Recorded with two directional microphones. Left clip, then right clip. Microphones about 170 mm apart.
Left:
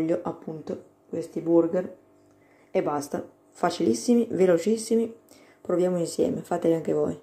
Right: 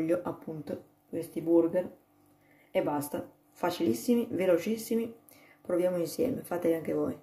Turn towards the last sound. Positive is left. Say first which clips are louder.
# left 6 dB
turn(degrees=20)  # may be behind; listen again after turning